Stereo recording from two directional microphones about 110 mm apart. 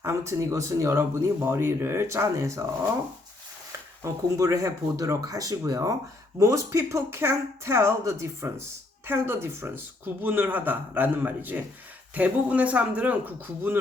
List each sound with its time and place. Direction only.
0.0 s speech: 25° right (ahead or behind)
4.0 s speech: 25° right (ahead or behind)